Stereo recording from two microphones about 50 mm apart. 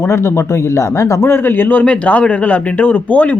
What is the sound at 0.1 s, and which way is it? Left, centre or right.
Speech, left.